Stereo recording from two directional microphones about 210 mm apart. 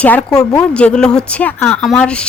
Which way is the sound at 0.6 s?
5° left (ahead or behind).